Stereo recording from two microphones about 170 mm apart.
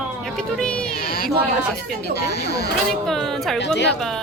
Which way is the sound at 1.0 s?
60° left (ahead or behind).